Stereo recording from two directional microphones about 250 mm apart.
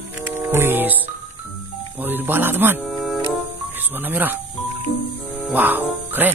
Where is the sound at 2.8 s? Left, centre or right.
Centre.